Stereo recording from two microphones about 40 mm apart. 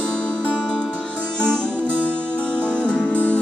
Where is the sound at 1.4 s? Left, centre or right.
Left.